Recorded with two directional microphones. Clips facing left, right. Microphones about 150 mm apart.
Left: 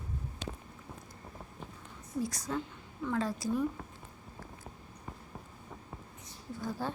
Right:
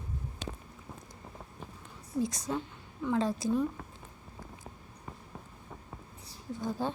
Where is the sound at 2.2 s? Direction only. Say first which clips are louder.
Right 2 dB; 20° right (ahead or behind).